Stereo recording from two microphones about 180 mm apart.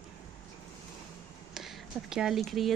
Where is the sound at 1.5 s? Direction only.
Centre (ahead or behind).